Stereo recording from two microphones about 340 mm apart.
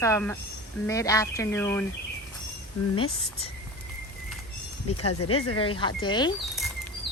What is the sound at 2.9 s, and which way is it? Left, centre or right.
Speech, centre.